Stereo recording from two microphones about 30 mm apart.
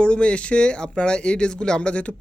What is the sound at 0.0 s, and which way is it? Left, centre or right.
Speech, left.